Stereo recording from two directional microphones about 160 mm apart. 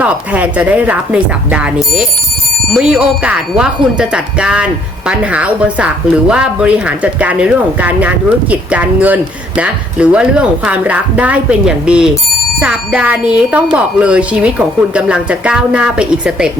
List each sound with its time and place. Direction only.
0.0 s a woman's voice: 10° right (ahead or behind)